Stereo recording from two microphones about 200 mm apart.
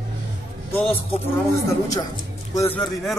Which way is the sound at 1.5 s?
15° left (ahead or behind).